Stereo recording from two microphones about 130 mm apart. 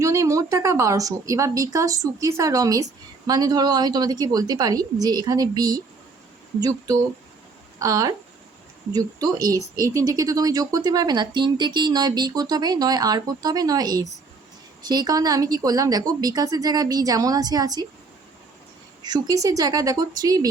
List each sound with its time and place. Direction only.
0.0 s a woman's voice: 25° right (ahead or behind)
19.0 s speech: 30° right (ahead or behind)